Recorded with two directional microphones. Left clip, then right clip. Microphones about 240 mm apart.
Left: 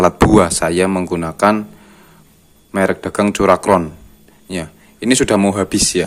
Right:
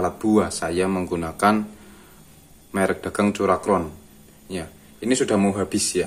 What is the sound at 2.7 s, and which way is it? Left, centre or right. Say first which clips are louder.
Speech: left 6 dB; left.